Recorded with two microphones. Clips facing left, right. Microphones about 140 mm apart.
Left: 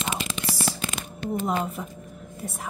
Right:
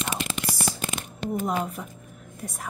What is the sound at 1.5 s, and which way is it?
Speech, centre (ahead or behind).